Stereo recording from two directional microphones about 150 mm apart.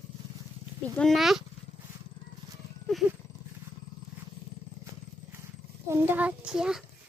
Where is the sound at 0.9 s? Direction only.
Centre (ahead or behind).